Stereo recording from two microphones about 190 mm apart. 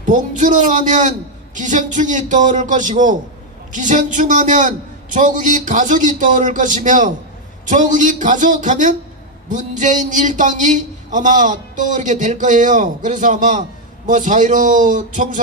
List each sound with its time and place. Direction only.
0.0 s a man's voice: 40° right (ahead or behind)